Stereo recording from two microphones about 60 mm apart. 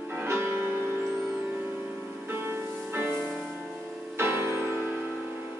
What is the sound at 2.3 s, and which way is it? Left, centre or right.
Music, right.